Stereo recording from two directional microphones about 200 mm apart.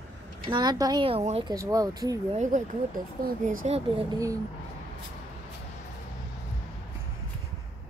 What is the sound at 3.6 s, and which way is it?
Speech, 30° right (ahead or behind).